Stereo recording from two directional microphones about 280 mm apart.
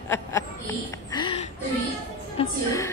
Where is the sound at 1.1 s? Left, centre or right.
Centre.